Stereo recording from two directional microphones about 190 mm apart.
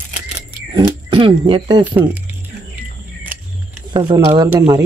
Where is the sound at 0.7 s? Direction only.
25° right (ahead or behind).